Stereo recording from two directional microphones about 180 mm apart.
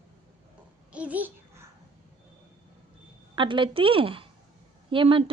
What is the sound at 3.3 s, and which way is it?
A woman's voice, 25° right (ahead or behind).